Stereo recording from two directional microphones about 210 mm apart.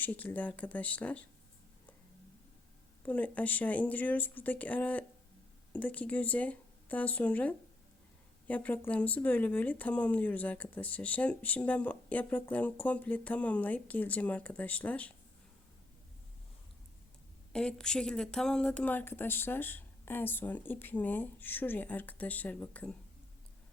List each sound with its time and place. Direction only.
0.0 s a woman's voice: 10° left (ahead or behind)
3.1 s a woman's voice: 5° left (ahead or behind)
17.5 s a woman's voice: 5° left (ahead or behind)